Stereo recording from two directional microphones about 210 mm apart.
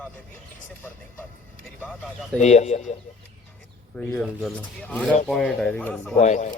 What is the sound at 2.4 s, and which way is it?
Speech, 35° left (ahead or behind).